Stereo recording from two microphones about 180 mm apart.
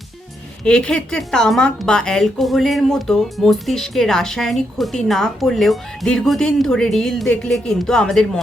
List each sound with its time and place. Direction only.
0.6 s speech: 5° left (ahead or behind)